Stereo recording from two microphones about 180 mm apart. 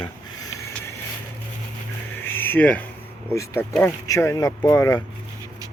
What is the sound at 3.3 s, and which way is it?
Speech, 15° left (ahead or behind).